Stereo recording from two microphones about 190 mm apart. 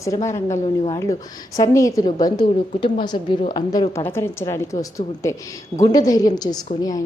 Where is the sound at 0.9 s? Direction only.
15° left (ahead or behind).